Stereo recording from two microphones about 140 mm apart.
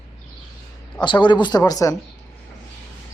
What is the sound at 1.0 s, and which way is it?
Speech, 35° left (ahead or behind).